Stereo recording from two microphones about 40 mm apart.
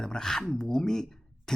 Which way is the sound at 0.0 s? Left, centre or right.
Centre.